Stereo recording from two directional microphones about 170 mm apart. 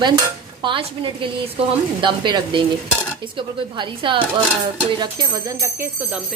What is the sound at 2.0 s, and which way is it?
Speech, 25° right (ahead or behind).